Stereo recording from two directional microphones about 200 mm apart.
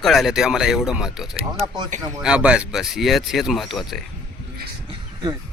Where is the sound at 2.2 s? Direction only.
5° right (ahead or behind).